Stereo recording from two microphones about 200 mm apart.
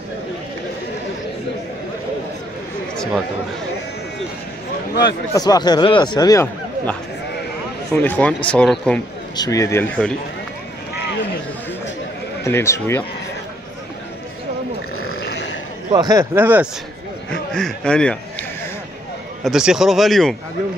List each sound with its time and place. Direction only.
2.9 s a sound: 5° left (ahead or behind)
5.3 s a man's voice: 20° left (ahead or behind)
9.4 s speech: 15° left (ahead or behind)
12.4 s speech: 15° left (ahead or behind)
15.9 s speech: 20° right (ahead or behind)
17.3 s a man's voice: 5° left (ahead or behind)
19.4 s a man's voice: 5° right (ahead or behind)